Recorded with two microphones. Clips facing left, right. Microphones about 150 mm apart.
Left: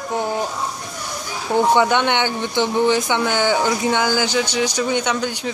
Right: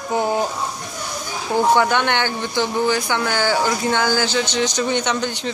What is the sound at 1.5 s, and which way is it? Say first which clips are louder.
Speech: left 1 dB; 20° left (ahead or behind).